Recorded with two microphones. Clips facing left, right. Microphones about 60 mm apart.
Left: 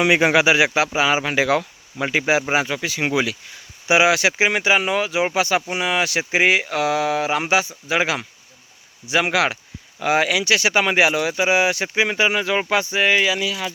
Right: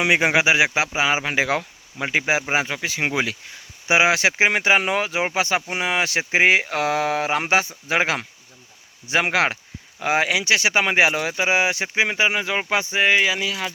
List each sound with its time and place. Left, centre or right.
0.0 s speech: centre; by 5.2 s right
5.2 s speech: right